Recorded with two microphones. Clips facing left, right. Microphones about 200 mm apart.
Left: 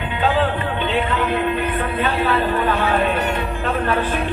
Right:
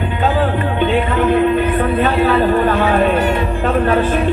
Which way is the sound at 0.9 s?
45° right (ahead or behind).